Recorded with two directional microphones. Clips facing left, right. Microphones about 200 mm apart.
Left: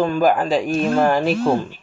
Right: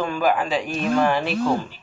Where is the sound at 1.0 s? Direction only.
40° left (ahead or behind).